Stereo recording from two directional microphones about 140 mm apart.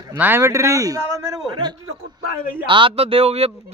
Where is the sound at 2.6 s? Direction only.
40° right (ahead or behind).